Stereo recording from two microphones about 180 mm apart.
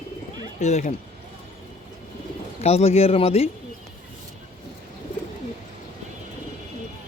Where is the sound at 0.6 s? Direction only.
40° left (ahead or behind).